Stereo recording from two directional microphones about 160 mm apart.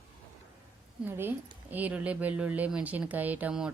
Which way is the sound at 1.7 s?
10° right (ahead or behind).